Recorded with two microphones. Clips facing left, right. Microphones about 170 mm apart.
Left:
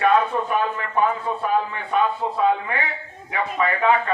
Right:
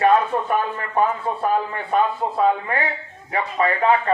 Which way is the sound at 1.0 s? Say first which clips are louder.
Right 1 dB; 40° right (ahead or behind).